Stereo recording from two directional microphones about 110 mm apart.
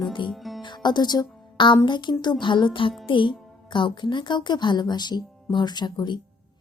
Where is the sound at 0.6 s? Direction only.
45° left (ahead or behind).